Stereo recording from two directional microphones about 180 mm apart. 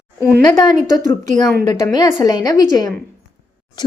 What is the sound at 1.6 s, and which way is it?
A woman's voice, 25° left (ahead or behind).